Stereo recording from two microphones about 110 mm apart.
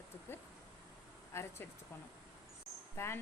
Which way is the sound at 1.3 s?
25° left (ahead or behind).